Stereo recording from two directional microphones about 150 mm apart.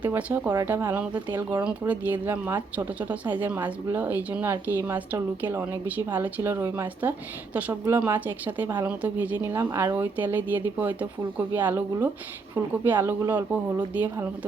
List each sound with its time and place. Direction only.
0.0 s speech: 10° right (ahead or behind)